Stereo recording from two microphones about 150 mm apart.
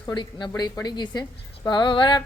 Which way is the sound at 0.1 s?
30° left (ahead or behind).